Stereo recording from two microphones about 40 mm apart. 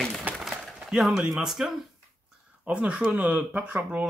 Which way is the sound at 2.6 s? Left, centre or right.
Right.